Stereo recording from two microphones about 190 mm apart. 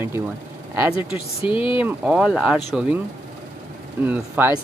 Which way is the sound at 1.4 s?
25° left (ahead or behind).